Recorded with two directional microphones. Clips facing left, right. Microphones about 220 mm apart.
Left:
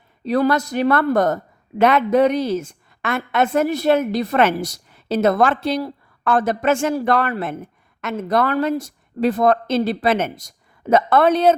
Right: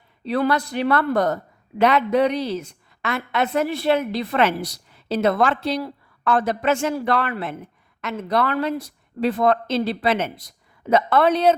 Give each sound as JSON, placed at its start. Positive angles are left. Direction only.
{"t": 0.3, "sound": "a woman's voice", "side_deg": 45}